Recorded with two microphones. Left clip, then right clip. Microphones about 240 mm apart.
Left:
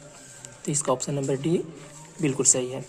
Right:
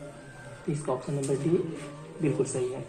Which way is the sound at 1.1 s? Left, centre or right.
Left.